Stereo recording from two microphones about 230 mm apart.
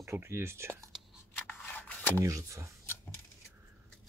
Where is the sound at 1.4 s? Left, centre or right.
Centre.